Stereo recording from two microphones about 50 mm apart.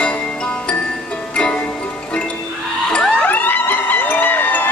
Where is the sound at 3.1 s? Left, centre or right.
Left.